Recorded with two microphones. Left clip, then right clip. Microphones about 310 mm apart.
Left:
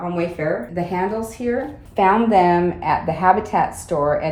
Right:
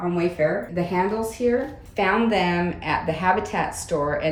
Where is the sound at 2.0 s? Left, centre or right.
Centre.